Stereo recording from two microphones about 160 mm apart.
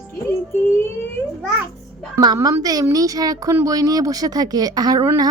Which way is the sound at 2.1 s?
25° right (ahead or behind).